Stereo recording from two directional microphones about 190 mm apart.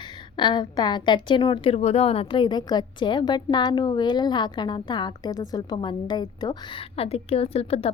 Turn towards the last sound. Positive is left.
turn(degrees=30)  # may be behind; listen again after turning